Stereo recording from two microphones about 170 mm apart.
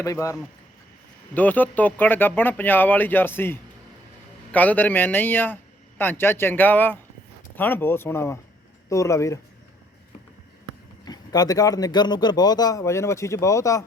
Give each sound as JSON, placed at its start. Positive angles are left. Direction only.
{"t": 0.0, "sound": "speech", "side_deg": 20}
{"t": 11.0, "sound": "speech", "side_deg": 25}